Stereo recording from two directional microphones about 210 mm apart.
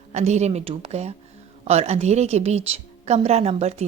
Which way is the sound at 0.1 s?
30° right (ahead or behind).